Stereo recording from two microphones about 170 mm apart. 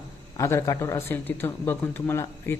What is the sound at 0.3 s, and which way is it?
Speech, 20° left (ahead or behind).